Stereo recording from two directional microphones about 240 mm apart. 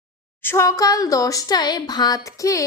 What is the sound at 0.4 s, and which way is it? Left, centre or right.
A woman's voice, centre.